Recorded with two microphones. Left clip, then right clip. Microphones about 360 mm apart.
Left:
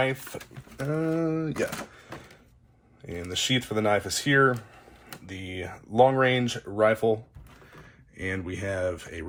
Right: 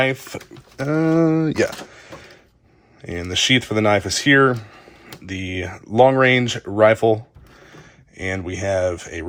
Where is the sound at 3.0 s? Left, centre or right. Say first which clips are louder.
Right 9 dB; right.